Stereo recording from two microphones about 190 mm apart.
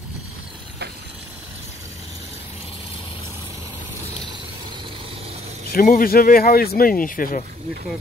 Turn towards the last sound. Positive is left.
turn(degrees=45)  # may be behind; listen again after turning